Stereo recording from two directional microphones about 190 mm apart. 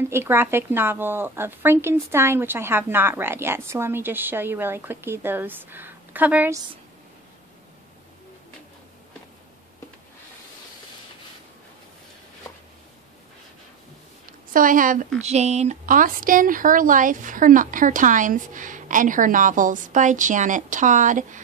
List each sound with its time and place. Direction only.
0.1 s a woman's voice: 10° right (ahead or behind)
14.5 s speech: 45° right (ahead or behind)